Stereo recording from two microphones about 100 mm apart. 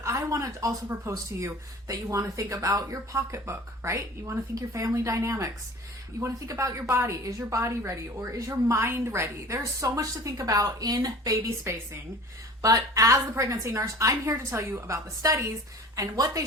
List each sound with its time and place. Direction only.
0.0 s a woman's voice: 30° right (ahead or behind)